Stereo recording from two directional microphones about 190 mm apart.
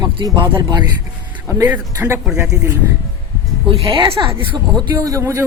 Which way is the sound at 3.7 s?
25° right (ahead or behind).